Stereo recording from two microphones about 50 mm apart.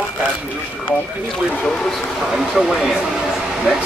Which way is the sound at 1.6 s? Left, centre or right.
Centre.